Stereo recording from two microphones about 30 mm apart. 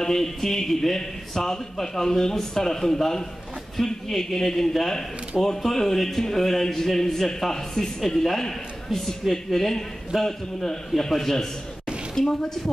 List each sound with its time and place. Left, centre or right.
0.0 s a man's voice: centre
12.2 s a woman's voice: centre